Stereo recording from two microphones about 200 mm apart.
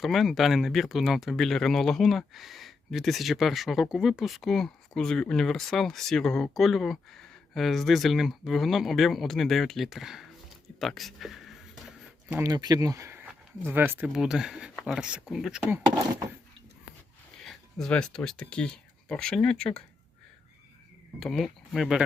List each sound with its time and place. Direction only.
0.0 s speech: centre (ahead or behind)
12.3 s speech: 15° right (ahead or behind)
17.4 s speech: centre (ahead or behind)
21.2 s speech: centre (ahead or behind)